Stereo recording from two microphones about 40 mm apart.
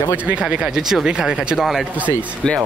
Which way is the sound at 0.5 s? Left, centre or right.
Centre.